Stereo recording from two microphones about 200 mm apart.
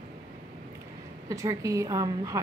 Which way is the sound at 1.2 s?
15° right (ahead or behind).